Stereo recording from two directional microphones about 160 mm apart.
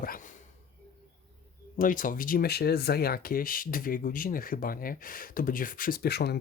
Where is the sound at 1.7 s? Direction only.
55° left (ahead or behind).